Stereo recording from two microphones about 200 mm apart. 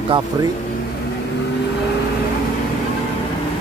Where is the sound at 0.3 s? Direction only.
20° right (ahead or behind).